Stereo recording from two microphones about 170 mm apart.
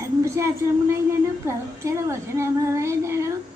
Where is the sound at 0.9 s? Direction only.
15° right (ahead or behind).